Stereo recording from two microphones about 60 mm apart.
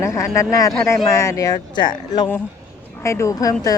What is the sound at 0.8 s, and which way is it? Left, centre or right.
Speech, left.